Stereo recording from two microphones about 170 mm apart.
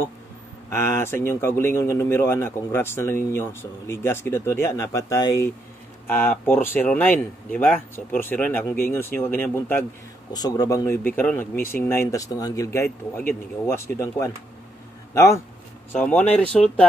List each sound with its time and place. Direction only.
0.7 s speech: 15° left (ahead or behind)
10.3 s speech: 25° left (ahead or behind); by 16.8 s 5° left (ahead or behind)